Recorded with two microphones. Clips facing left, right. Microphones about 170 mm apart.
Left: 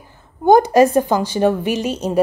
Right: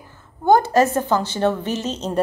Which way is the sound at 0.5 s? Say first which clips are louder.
Left 4 dB; 15° left (ahead or behind).